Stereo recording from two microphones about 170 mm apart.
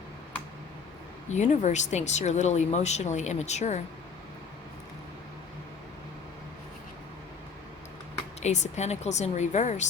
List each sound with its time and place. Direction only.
1.3 s speech: 45° left (ahead or behind)
8.4 s speech: 40° left (ahead or behind)